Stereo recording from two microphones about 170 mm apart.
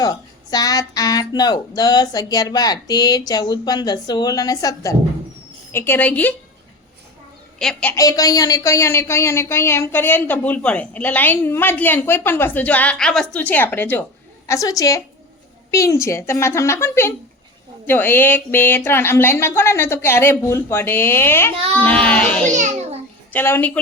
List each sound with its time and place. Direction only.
0.0 s speech: 20° left (ahead or behind)
7.6 s a child's voice: 5° left (ahead or behind)
7.9 s speech: 20° left (ahead or behind)
22.5 s a child's voice: 45° right (ahead or behind)
23.3 s speech: 10° left (ahead or behind)